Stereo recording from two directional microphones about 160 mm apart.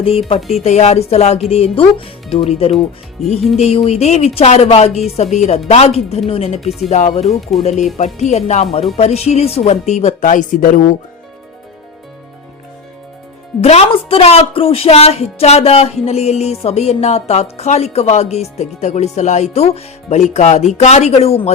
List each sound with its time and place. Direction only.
0.0 s a woman's voice: 35° left (ahead or behind)
0.3 s speech: centre (ahead or behind)
0.6 s a woman's voice: 45° left (ahead or behind)
6.6 s speech: centre (ahead or behind)
6.9 s speech: 45° left (ahead or behind)
13.6 s a woman's voice: 40° left (ahead or behind)